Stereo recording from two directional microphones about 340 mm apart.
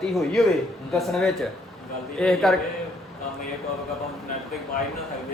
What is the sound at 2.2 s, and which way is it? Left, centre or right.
Speech, centre.